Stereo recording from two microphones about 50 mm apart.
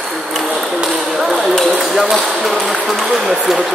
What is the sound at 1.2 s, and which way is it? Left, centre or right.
Ping, centre.